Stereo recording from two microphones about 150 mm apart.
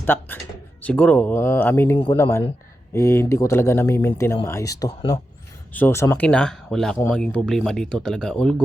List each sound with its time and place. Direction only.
0.0 s speech: 15° left (ahead or behind)